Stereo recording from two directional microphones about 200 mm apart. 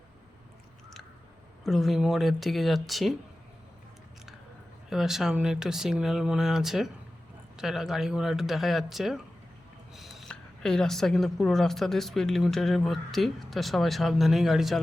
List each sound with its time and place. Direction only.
1.6 s speech: centre (ahead or behind)
4.9 s speech: centre (ahead or behind)